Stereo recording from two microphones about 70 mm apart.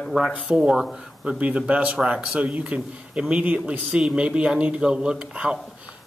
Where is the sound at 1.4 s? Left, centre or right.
Centre.